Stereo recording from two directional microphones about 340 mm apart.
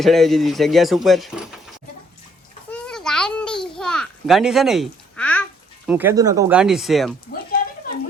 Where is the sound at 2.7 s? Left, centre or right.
Centre.